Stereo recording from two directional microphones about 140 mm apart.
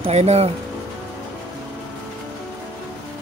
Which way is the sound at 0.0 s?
50° right (ahead or behind).